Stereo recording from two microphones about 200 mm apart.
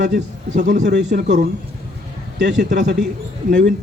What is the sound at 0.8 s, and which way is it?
Speech, 60° right (ahead or behind).